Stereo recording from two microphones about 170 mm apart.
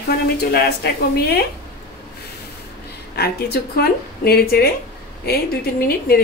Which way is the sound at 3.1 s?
65° left (ahead or behind).